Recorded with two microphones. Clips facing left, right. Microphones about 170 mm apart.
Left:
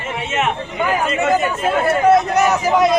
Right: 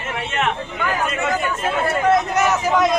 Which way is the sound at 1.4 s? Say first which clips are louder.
Left 4 dB; 5° left (ahead or behind).